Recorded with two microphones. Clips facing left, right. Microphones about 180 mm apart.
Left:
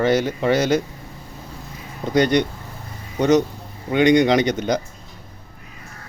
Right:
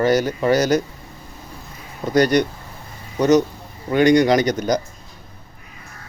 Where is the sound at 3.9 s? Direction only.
20° left (ahead or behind).